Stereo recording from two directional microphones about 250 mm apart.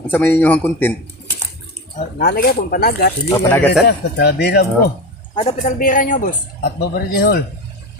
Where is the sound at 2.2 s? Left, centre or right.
Left.